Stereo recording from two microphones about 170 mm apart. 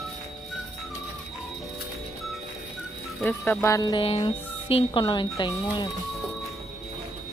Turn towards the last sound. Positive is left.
turn(degrees=25)  # may be behind; listen again after turning